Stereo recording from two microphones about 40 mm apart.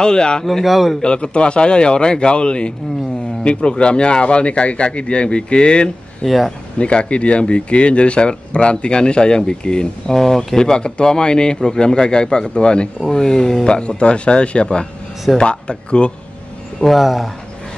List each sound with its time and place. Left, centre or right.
0.0 s speech: left
0.5 s a man's voice: centre
1.0 s speech: left
6.2 s a man's voice: centre
6.8 s speech: left
10.1 s speech: centre; by 16.1 s left
16.8 s a man's voice: centre